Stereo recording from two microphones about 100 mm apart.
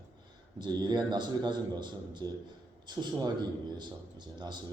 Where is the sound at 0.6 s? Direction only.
45° right (ahead or behind).